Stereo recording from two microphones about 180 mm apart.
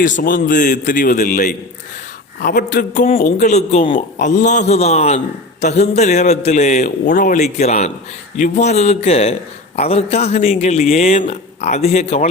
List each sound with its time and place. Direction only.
0.0 s a man's voice: 50° left (ahead or behind); by 4.0 s 30° left (ahead or behind)
4.2 s a man's voice: 45° left (ahead or behind)